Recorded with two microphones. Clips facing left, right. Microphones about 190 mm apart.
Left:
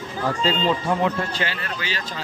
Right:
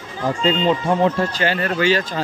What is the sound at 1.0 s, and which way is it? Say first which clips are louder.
Speech: right 5 dB; 45° right (ahead or behind).